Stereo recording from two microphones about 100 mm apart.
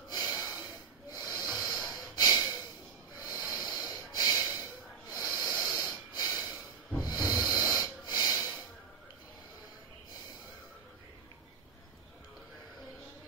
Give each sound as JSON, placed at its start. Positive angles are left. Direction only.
{"t": 0.1, "sound": "snort", "side_deg": 35}
{"t": 7.0, "sound": "snoring", "side_deg": 40}